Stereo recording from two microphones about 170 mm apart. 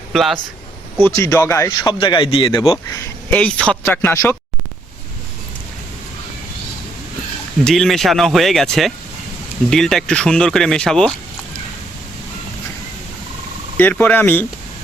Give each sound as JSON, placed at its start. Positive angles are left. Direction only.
{"t": 0.1, "sound": "speech", "side_deg": 0}
{"t": 0.9, "sound": "a man's voice", "side_deg": 15}
{"t": 7.6, "sound": "speech", "side_deg": 0}
{"t": 13.7, "sound": "a man's voice", "side_deg": 10}